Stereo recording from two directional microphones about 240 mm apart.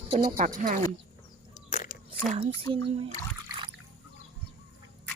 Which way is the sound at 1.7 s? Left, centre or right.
Left.